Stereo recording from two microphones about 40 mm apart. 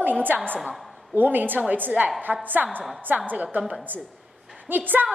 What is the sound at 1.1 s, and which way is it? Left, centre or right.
A woman's voice, right.